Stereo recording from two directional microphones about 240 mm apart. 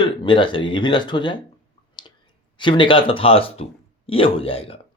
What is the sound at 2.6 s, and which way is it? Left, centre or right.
Speech, centre.